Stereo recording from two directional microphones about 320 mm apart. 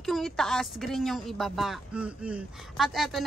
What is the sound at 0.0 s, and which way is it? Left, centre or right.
Speech, centre.